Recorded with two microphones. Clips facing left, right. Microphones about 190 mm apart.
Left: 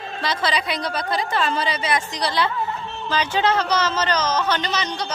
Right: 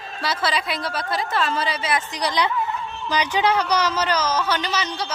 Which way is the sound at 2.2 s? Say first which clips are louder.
Even; 15° right (ahead or behind).